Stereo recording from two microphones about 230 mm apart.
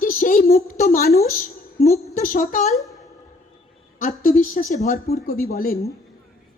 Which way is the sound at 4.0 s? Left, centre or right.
Left.